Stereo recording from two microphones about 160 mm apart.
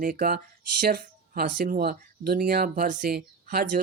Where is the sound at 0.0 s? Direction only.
65° right (ahead or behind).